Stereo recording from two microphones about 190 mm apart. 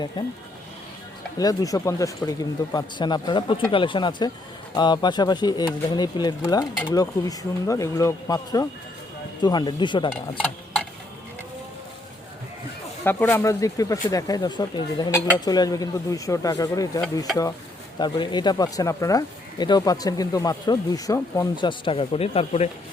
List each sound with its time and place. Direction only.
0.2 s speech: 25° left (ahead or behind)
1.4 s speech: 20° left (ahead or behind)
13.1 s speech: 10° left (ahead or behind)
18.0 s speech: 25° left (ahead or behind)